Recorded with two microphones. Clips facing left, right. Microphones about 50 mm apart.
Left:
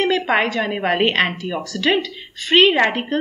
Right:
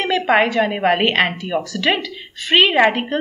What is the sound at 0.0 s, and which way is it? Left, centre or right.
A woman's voice, centre.